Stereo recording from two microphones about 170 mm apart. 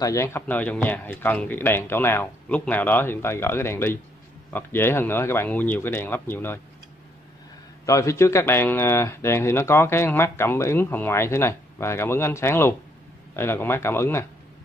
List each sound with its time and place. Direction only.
0.0 s speech: 15° left (ahead or behind)
7.8 s speech: 20° left (ahead or behind)